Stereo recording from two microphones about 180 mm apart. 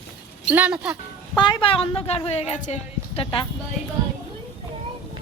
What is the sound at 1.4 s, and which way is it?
Speech, 25° left (ahead or behind).